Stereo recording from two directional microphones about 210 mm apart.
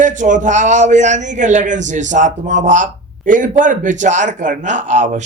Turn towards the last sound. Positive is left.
turn(degrees=-35)  # may be behind; listen again after turning